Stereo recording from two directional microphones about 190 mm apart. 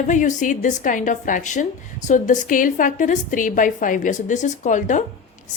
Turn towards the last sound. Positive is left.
turn(degrees=40)  # may be behind; listen again after turning